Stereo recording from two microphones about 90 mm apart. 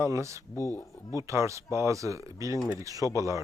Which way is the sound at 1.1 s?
35° right (ahead or behind).